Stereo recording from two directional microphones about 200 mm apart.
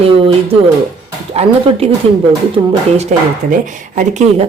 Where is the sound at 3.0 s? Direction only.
40° right (ahead or behind).